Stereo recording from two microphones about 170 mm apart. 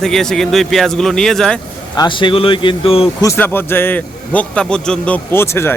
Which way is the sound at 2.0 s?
30° left (ahead or behind).